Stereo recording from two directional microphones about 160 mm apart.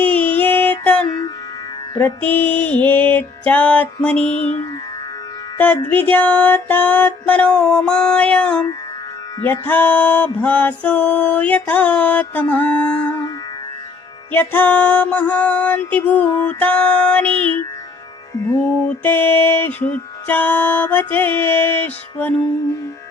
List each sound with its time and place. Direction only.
0.0 s music: 10° left (ahead or behind)
4.4 s music: 40° left (ahead or behind)
5.5 s music: 10° left (ahead or behind)
14.3 s music: 10° left (ahead or behind)
18.9 s music: 10° left (ahead or behind)